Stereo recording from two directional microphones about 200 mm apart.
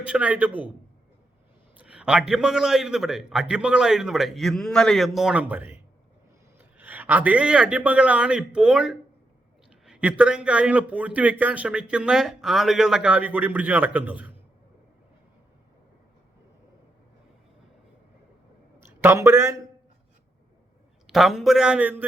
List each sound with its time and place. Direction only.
0.0 s speech: 5° right (ahead or behind)
1.8 s a man's voice: 5° right (ahead or behind)
19.0 s speech: 15° right (ahead or behind)
21.1 s speech: centre (ahead or behind)